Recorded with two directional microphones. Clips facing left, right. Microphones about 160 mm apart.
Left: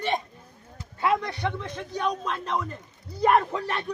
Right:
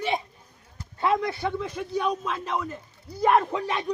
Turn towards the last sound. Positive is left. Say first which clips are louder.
# right 2 dB
turn(degrees=-15)  # may be behind; listen again after turning